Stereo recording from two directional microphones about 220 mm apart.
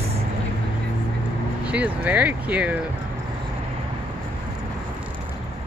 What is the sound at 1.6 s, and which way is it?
Speech, 5° right (ahead or behind).